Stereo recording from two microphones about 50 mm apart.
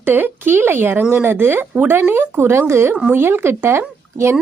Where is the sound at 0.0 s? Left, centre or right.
Right.